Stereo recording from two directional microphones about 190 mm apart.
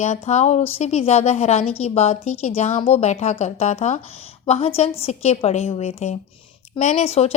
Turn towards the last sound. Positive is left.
turn(degrees=30)  # may be behind; listen again after turning